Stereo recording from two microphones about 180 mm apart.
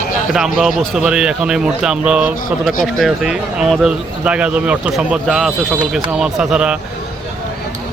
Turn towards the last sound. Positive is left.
turn(degrees=-5)  # may be behind; listen again after turning